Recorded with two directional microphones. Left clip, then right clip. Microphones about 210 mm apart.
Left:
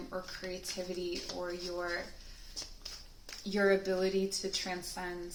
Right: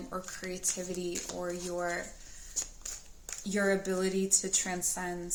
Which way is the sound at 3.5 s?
45° right (ahead or behind).